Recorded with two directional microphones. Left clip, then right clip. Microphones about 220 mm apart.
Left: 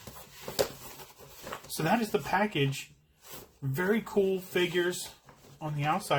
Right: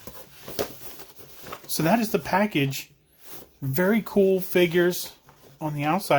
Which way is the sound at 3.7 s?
55° right (ahead or behind).